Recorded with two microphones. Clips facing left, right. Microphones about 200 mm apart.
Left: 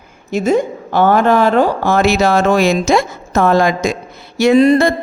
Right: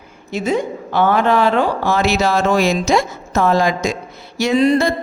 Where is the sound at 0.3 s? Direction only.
45° left (ahead or behind).